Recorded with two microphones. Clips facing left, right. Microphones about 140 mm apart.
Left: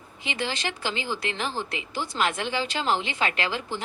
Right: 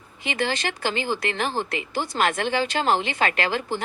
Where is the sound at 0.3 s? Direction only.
50° right (ahead or behind).